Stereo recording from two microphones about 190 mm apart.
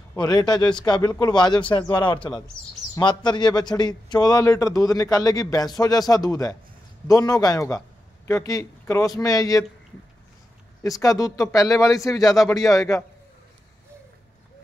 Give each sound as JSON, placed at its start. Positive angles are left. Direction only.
{"t": 0.1, "sound": "a man's voice", "side_deg": 20}
{"t": 10.8, "sound": "speech", "side_deg": 15}